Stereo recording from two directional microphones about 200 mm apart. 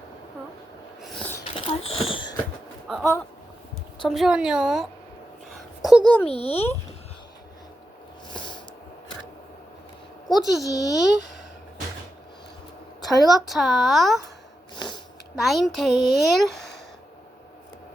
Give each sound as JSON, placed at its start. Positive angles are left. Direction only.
{"t": 1.0, "sound": "sneeze", "side_deg": 5}
{"t": 1.5, "sound": "speech", "side_deg": 30}
{"t": 2.9, "sound": "a woman's voice", "side_deg": 5}
{"t": 5.5, "sound": "a sound", "side_deg": 0}
{"t": 6.2, "sound": "a child's voice", "side_deg": 30}
{"t": 8.3, "sound": "a sound", "side_deg": 25}
{"t": 10.2, "sound": "a woman's voice", "side_deg": 0}
{"t": 10.6, "sound": "a child's voice", "side_deg": 20}
{"t": 13.0, "sound": "a woman's voice", "side_deg": 0}
{"t": 15.4, "sound": "a woman's voice", "side_deg": 0}
{"t": 16.6, "sound": "a sound", "side_deg": 60}